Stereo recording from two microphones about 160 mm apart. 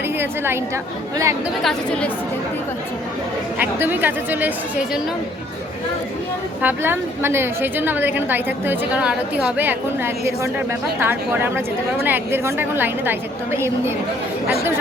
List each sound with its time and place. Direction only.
0.2 s a woman's voice: 15° right (ahead or behind)
1.6 s a woman's voice: 5° left (ahead or behind)
3.6 s a woman's voice: 10° right (ahead or behind)
6.6 s a woman's voice: 10° right (ahead or behind)